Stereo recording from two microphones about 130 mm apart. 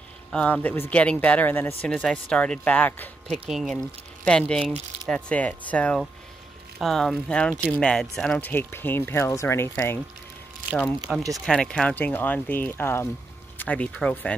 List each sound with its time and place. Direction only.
0.3 s speech: 10° left (ahead or behind)
3.4 s speech: centre (ahead or behind)
3.7 s speech: 10° left (ahead or behind)
8.4 s speech: 15° left (ahead or behind)
11.3 s speech: 5° left (ahead or behind)